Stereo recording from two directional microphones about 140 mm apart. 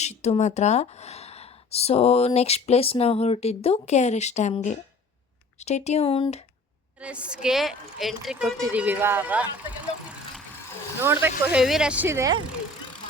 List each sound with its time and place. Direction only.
0.0 s speech: 55° left (ahead or behind)
5.5 s speech: 50° left (ahead or behind)
7.0 s speech: 10° right (ahead or behind)
11.0 s speech: 15° right (ahead or behind)